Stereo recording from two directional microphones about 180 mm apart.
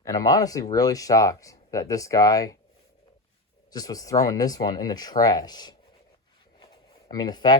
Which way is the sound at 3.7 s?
20° left (ahead or behind).